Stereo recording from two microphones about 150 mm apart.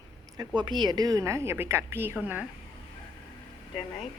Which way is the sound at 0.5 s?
30° right (ahead or behind).